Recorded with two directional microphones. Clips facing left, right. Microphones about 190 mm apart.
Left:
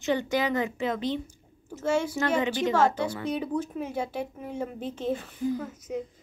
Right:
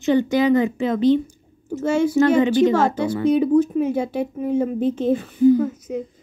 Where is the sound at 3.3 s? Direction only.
15° right (ahead or behind).